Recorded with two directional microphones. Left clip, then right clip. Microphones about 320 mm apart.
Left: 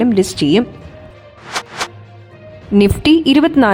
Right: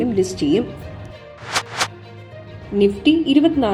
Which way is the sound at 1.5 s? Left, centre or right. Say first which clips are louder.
Even; centre.